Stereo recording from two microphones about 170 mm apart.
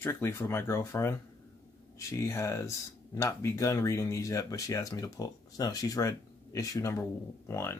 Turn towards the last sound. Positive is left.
turn(degrees=15)  # may be behind; listen again after turning